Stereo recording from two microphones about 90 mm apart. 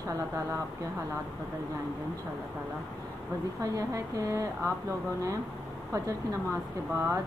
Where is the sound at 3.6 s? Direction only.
40° right (ahead or behind).